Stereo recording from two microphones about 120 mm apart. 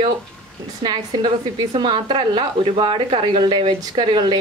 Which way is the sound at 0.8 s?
40° right (ahead or behind).